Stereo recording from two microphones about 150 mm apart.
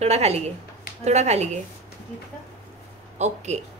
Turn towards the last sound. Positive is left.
turn(degrees=-50)  # may be behind; listen again after turning